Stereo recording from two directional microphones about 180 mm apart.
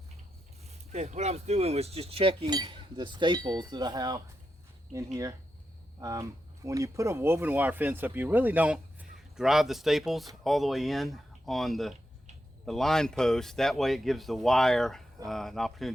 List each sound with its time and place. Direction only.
0.7 s speech: 35° right (ahead or behind); by 4.2 s 20° right (ahead or behind)
6.0 s speech: 20° right (ahead or behind); by 15.9 s centre (ahead or behind)